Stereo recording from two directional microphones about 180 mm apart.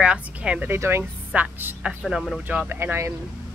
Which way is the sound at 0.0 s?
5° right (ahead or behind).